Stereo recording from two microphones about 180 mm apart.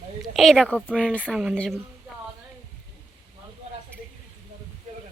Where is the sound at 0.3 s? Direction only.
Centre (ahead or behind).